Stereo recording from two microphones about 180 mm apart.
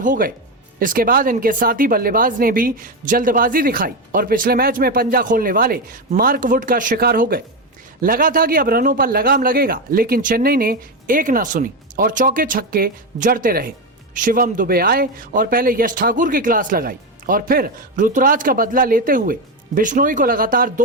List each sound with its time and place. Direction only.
0.0 s a man's voice: 50° right (ahead or behind)